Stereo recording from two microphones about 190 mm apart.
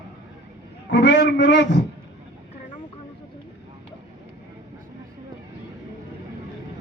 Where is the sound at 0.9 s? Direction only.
65° left (ahead or behind).